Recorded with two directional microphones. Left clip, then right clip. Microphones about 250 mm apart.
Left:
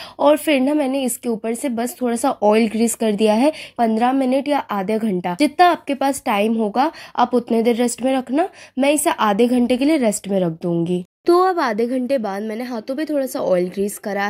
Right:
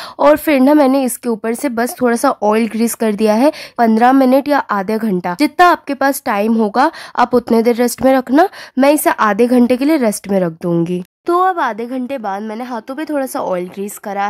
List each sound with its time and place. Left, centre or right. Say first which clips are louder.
0.2 s a woman's voice: right 5 dB; centre
11.4 s a woman's voice: right 3 dB; centre